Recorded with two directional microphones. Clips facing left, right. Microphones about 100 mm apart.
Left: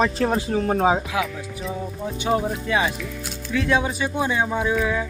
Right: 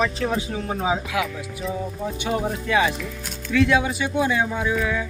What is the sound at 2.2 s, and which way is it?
Speech, 30° left (ahead or behind).